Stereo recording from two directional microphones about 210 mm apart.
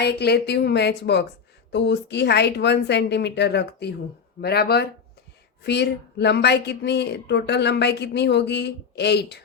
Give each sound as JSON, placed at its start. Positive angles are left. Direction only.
{"t": 0.0, "sound": "a woman's voice", "side_deg": 50}